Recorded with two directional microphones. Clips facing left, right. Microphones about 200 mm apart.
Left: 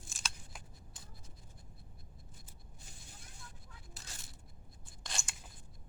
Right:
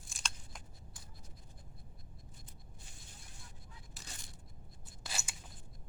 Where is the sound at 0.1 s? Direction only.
5° left (ahead or behind).